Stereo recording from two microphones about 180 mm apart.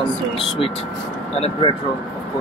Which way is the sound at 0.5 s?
30° left (ahead or behind).